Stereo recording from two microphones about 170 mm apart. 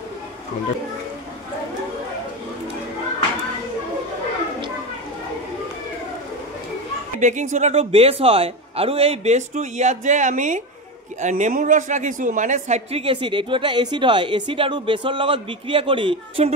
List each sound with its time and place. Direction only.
7.2 s speech: 45° right (ahead or behind)